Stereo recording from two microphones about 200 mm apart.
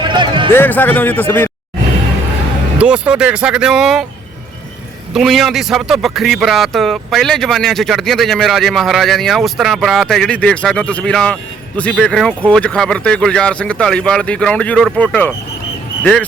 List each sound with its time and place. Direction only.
0.0 s music: 25° right (ahead or behind)
0.5 s a man's voice: 10° left (ahead or behind)
2.7 s speech: 5° right (ahead or behind)
5.1 s speech: centre (ahead or behind)